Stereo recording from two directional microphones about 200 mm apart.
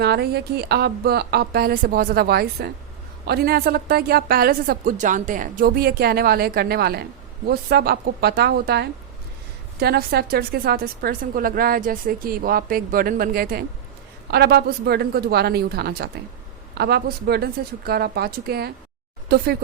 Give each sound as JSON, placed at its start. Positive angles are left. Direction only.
{"t": 0.0, "sound": "a woman's voice", "side_deg": -55}